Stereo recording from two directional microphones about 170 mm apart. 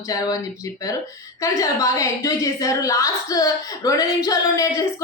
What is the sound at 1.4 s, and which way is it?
A woman's voice, 20° left (ahead or behind).